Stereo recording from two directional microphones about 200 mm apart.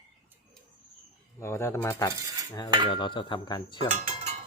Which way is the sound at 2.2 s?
15° right (ahead or behind).